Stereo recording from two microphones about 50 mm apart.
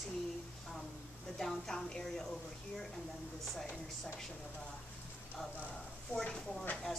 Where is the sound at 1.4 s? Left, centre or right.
Centre.